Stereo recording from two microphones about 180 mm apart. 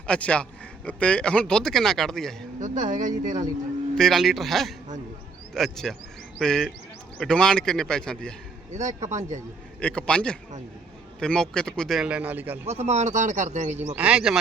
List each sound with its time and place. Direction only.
0.1 s a man's voice: 5° left (ahead or behind)
2.6 s speech: 45° right (ahead or behind)
3.9 s speech: centre (ahead or behind)
9.0 s speech: 40° right (ahead or behind)
9.8 s speech: 5° left (ahead or behind)
12.6 s speech: 35° right (ahead or behind)
13.8 s speech: 5° right (ahead or behind)